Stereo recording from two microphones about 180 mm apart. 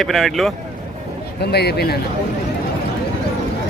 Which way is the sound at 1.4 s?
65° left (ahead or behind).